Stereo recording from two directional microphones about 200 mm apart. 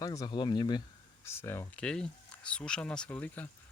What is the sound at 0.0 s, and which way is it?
Speech, 15° left (ahead or behind).